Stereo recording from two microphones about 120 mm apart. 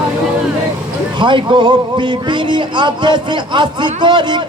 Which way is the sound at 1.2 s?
40° right (ahead or behind).